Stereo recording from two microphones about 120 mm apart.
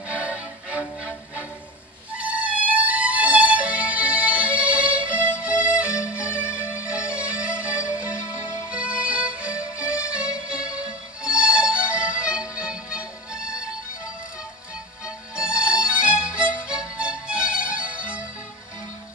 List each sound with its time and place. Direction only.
0.1 s music: 10° right (ahead or behind)
15.0 s music: 10° right (ahead or behind)